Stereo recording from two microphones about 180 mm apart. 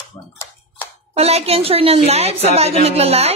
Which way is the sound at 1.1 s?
35° right (ahead or behind).